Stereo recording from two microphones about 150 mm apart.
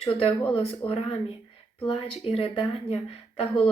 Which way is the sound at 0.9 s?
40° left (ahead or behind).